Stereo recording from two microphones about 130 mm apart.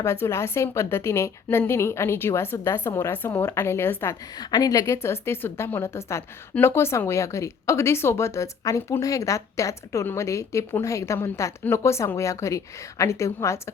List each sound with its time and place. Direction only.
0.0 s speech: 20° left (ahead or behind)
4.4 s speech: 30° left (ahead or behind)